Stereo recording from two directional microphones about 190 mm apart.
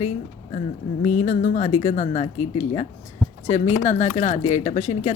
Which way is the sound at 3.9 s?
40° left (ahead or behind).